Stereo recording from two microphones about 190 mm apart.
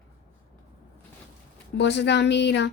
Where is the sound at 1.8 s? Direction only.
65° left (ahead or behind).